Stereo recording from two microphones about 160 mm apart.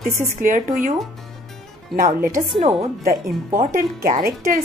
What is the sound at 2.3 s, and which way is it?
A woman's voice, 55° right (ahead or behind).